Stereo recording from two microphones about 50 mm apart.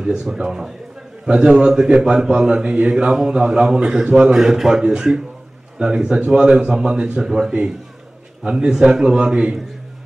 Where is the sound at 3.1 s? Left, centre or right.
Centre.